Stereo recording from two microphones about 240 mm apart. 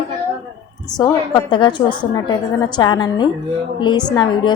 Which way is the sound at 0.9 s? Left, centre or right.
Centre.